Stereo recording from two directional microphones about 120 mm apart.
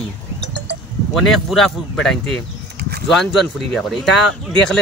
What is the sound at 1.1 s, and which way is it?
Speech, centre (ahead or behind).